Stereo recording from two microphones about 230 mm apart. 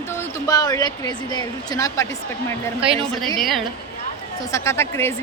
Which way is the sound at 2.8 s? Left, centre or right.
Centre.